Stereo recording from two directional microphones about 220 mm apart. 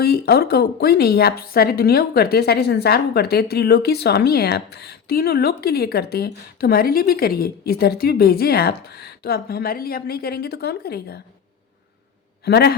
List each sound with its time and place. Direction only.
0.0 s a woman's voice: 45° left (ahead or behind)
12.5 s a woman's voice: 45° left (ahead or behind)